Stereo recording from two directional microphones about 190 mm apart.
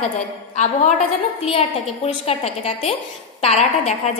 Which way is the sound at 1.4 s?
35° left (ahead or behind).